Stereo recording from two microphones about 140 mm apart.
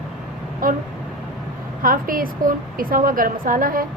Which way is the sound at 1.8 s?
85° right.